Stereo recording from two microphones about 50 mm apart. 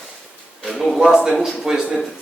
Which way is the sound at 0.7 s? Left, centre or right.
Centre.